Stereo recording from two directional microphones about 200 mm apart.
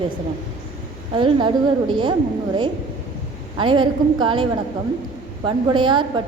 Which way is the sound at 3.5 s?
25° right (ahead or behind).